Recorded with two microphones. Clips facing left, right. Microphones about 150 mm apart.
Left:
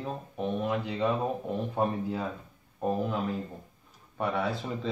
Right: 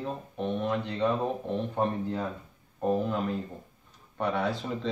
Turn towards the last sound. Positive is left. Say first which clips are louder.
# right 1 dB
turn(degrees=5)  # may be behind; listen again after turning